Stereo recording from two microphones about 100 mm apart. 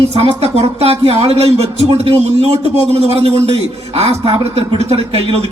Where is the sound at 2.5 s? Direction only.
90° right.